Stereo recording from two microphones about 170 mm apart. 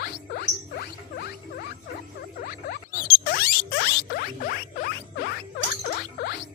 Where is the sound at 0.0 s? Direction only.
65° left (ahead or behind).